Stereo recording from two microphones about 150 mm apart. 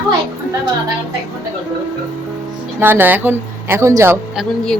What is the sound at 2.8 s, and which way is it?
A woman's voice, 15° right (ahead or behind).